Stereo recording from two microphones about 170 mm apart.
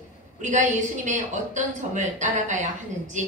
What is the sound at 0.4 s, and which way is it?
A woman's voice, 45° right (ahead or behind).